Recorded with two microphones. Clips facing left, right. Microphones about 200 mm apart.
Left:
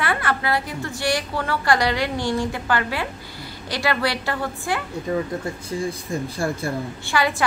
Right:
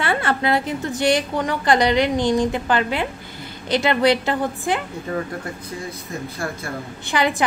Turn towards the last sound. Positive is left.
turn(degrees=-20)  # may be behind; listen again after turning